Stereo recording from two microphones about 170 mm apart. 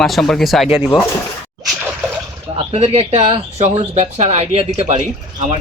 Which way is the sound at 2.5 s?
35° right (ahead or behind).